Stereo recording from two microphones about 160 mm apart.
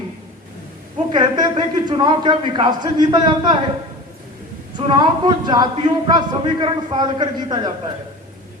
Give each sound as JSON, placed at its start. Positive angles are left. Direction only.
{"t": 1.1, "sound": "a man's voice", "side_deg": -30}
{"t": 4.8, "sound": "a man's voice", "side_deg": -30}